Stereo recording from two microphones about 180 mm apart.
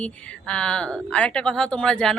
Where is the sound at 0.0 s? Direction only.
5° left (ahead or behind).